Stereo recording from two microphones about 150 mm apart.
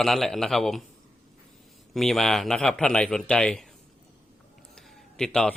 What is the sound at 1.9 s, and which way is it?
Speech, centre (ahead or behind).